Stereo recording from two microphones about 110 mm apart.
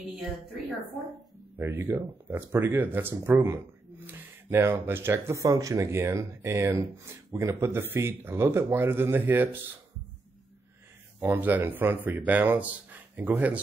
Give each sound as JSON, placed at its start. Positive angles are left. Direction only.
{"t": 1.6, "sound": "speech", "side_deg": -20}
{"t": 11.1, "sound": "speech", "side_deg": -20}